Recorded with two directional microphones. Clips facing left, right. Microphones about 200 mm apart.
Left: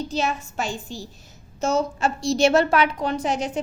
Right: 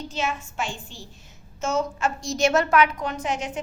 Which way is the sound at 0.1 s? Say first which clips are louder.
Left 3 dB; 35° left (ahead or behind).